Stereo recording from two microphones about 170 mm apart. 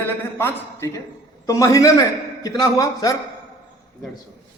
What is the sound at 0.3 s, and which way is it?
A woman's voice, 15° left (ahead or behind).